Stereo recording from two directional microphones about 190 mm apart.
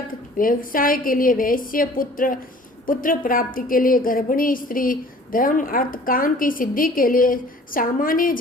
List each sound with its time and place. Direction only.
0.1 s a woman's voice: 45° left (ahead or behind)